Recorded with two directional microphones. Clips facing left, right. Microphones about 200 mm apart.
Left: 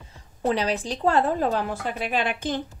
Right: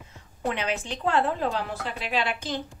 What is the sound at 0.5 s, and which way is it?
A woman's voice, 35° left (ahead or behind).